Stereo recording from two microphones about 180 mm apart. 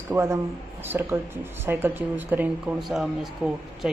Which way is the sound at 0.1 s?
15° right (ahead or behind).